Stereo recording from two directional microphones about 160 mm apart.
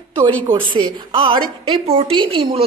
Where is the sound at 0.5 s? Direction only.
30° right (ahead or behind).